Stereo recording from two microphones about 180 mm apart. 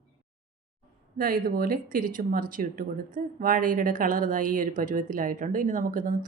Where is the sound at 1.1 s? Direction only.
55° right (ahead or behind).